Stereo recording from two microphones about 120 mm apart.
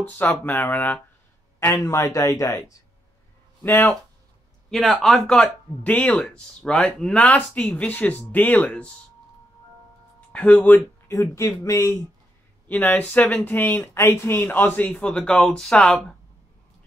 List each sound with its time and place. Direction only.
0.0 s speech: 15° left (ahead or behind)
1.8 s speech: 25° left (ahead or behind)
4.6 s speech: centre (ahead or behind)
10.3 s speech: 10° left (ahead or behind)
11.1 s speech: 25° left (ahead or behind)
12.6 s speech: 15° left (ahead or behind)